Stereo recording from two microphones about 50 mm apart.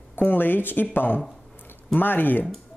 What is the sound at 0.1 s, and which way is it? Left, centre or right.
Speech, left.